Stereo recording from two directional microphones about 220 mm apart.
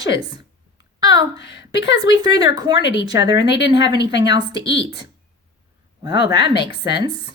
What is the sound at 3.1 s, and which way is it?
Speech, 20° right (ahead or behind).